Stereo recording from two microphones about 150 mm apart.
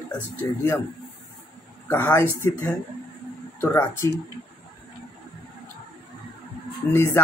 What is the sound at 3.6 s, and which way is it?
Speech, 15° left (ahead or behind).